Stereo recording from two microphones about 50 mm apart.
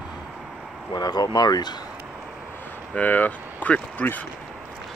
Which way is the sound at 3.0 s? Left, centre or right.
Left.